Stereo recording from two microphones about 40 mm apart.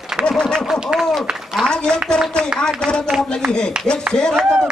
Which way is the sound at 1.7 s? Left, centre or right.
Centre.